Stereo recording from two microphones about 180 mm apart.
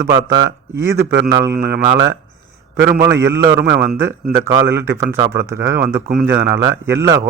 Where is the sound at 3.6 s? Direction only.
65° right (ahead or behind).